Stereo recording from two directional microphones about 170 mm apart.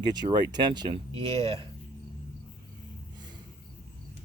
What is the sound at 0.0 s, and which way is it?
Speech, 25° right (ahead or behind).